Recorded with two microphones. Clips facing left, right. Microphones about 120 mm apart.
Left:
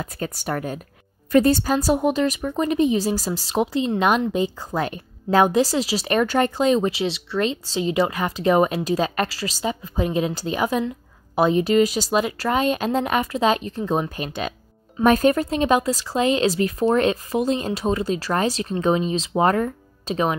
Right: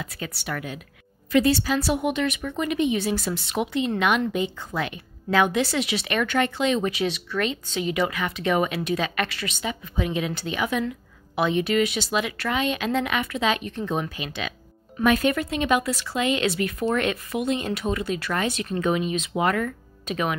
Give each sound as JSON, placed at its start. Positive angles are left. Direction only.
{"t": 0.0, "sound": "a woman's voice", "side_deg": 45}